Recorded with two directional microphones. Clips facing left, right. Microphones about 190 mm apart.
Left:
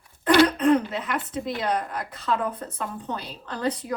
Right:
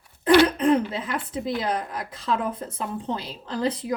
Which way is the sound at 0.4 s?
30° right (ahead or behind).